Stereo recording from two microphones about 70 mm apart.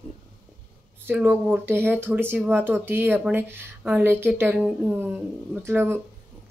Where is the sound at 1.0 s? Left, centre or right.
Right.